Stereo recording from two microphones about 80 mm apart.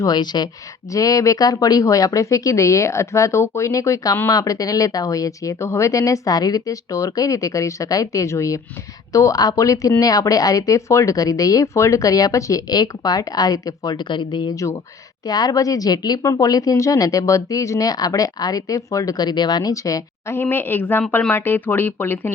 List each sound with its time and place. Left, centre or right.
0.0 s a woman's voice: left
0.9 s speech: left
14.5 s speech: left
15.3 s a woman's voice: left
19.7 s a woman's voice: left